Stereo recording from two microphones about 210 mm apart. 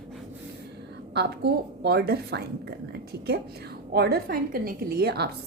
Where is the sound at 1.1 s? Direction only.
50° right (ahead or behind).